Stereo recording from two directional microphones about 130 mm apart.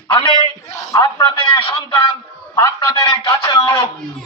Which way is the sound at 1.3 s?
40° left (ahead or behind).